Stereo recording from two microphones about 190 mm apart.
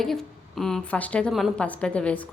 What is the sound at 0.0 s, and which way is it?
A woman's voice, centre (ahead or behind).